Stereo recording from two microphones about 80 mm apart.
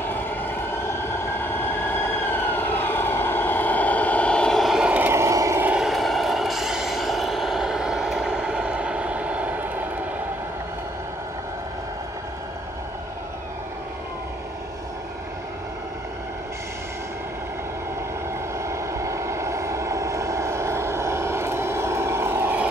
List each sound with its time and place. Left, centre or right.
0.1 s train: left
4.6 s vehicle: centre
4.8 s vehicle: centre
5.1 s vehicle: right
5.8 s vehicle: centre; by 9.8 s right
18.6 s vehicle: right